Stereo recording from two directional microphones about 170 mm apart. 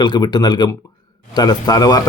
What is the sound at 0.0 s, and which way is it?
A man's voice, 25° left (ahead or behind).